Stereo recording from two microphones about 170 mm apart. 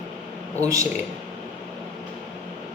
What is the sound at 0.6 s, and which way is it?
Speech, 20° right (ahead or behind).